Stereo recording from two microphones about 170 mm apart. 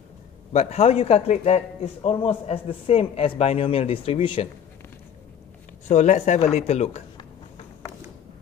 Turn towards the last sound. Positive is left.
turn(degrees=40)  # may be behind; listen again after turning